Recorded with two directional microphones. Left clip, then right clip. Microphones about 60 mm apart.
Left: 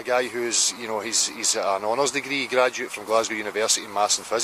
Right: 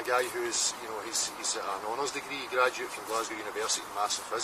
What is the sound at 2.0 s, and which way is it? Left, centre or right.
Speech, left.